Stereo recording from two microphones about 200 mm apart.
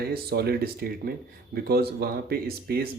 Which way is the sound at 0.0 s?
50° right (ahead or behind).